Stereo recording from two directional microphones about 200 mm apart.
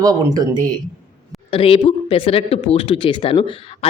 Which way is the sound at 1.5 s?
25° left (ahead or behind).